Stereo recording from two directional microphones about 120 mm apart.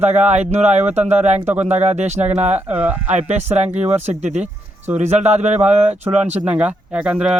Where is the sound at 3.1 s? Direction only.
70° right (ahead or behind).